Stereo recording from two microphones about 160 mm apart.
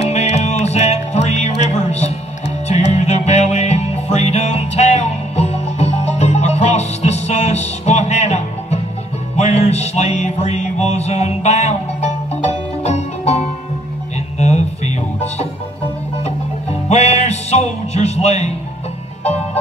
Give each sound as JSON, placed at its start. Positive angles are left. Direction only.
{"t": 0.1, "sound": "music", "side_deg": 45}
{"t": 14.4, "sound": "music", "side_deg": 45}
{"t": 16.9, "sound": "music", "side_deg": 40}